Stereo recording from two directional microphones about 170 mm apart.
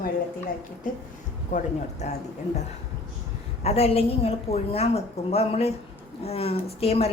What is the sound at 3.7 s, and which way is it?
A woman's voice, 35° left (ahead or behind).